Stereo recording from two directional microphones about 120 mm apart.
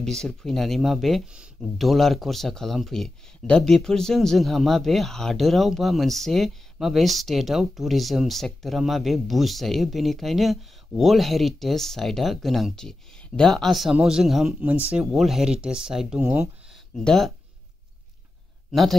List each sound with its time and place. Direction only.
0.0 s speech: 5° left (ahead or behind)
14.6 s speech: 15° right (ahead or behind)
15.0 s speech: centre (ahead or behind)
16.2 s speech: 20° right (ahead or behind)
16.9 s speech: 5° left (ahead or behind)
18.7 s speech: centre (ahead or behind)